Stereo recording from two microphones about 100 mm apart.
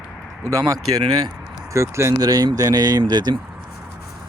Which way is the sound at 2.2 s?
40° right (ahead or behind).